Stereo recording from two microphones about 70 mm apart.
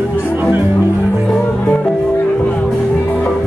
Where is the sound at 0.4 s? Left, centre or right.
Right.